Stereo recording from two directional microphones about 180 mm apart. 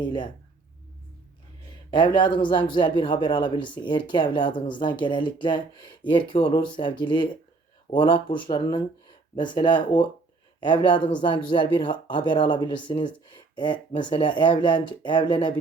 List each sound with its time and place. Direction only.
0.0 s speech: 25° left (ahead or behind)
1.9 s speech: 25° left (ahead or behind)